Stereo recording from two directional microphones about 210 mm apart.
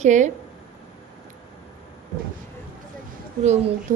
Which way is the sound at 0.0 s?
35° right (ahead or behind).